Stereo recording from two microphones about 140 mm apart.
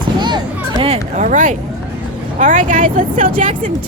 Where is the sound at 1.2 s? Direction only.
65° right (ahead or behind).